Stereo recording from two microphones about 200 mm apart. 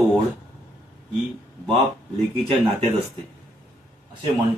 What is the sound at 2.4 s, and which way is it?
Speech, 30° right (ahead or behind).